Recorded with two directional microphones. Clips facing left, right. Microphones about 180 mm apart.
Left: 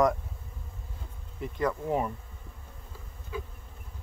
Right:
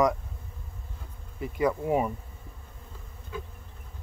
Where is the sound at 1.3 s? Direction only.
10° right (ahead or behind).